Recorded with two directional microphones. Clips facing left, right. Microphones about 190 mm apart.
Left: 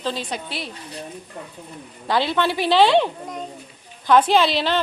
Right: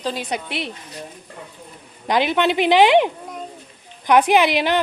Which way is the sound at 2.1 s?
15° right (ahead or behind).